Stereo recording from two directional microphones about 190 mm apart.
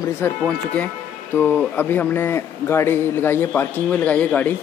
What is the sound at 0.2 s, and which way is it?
Speech, 10° left (ahead or behind).